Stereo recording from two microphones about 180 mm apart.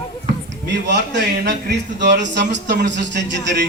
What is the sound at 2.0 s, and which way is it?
Speech, 75° right (ahead or behind).